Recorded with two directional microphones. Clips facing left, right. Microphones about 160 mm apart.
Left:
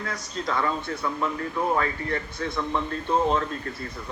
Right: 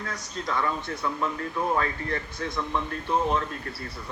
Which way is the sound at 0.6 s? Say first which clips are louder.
Left 2 dB; 25° left (ahead or behind).